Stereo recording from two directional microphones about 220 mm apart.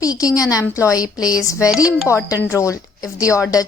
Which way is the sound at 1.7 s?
5° right (ahead or behind).